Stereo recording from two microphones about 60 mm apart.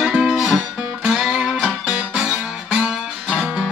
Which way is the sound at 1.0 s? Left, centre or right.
Centre.